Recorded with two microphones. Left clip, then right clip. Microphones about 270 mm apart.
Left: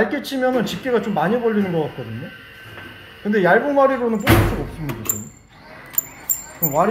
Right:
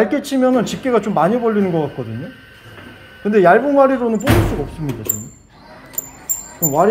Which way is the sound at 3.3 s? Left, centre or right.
Right.